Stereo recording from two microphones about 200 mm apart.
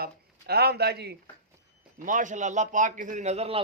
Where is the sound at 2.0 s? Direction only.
40° right (ahead or behind).